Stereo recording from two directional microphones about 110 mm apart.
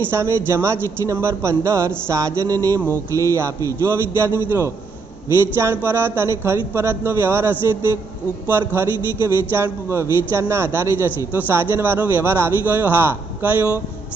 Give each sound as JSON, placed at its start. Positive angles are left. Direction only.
{"t": 0.1, "sound": "a man's voice", "side_deg": -20}